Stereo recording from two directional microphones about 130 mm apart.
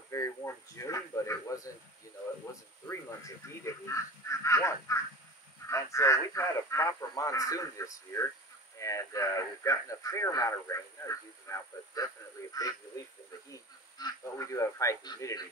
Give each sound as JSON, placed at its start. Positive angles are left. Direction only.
{"t": 0.1, "sound": "speech", "side_deg": 25}
{"t": 3.4, "sound": "speech", "side_deg": 25}